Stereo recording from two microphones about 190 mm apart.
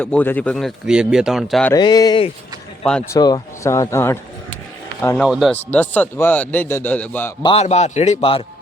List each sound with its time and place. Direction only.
0.0 s speech: 10° left (ahead or behind)
1.7 s a man's voice: 20° left (ahead or behind)
7.4 s a man's voice: 35° left (ahead or behind)